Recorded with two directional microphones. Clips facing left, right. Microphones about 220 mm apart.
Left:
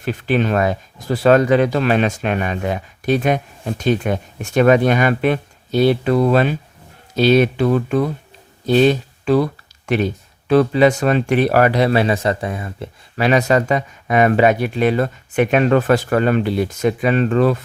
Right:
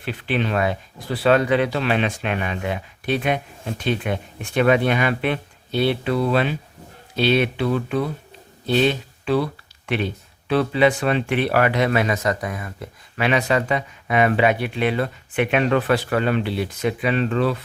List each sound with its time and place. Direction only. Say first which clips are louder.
0.0 s speech: left 5 dB; 45° left (ahead or behind)